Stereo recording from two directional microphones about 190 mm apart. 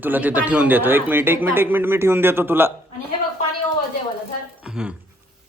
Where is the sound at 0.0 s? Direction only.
10° right (ahead or behind).